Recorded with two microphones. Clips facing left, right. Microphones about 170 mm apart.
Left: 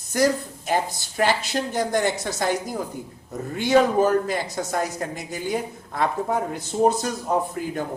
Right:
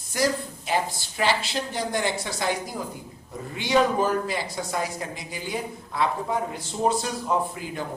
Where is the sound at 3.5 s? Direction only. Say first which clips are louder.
Left 4 dB; 50° left (ahead or behind).